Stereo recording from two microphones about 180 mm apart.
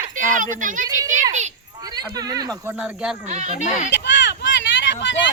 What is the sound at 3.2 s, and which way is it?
Speech, 45° right (ahead or behind).